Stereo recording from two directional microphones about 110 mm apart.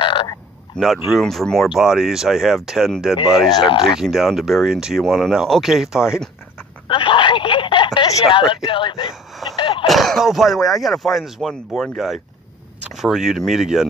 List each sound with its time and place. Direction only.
0.0 s a sound: 50° left (ahead or behind)
0.7 s speech: centre (ahead or behind)
3.5 s speech: 45° left (ahead or behind)
4.0 s speech: centre (ahead or behind)
6.9 s a sound: 50° left (ahead or behind)
8.3 s speech: 50° left (ahead or behind)
9.6 s a sound: 50° left (ahead or behind)
9.8 s speech: centre (ahead or behind)
12.9 s speech: 5° right (ahead or behind)